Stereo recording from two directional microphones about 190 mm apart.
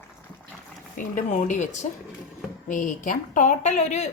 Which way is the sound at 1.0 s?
45° left (ahead or behind).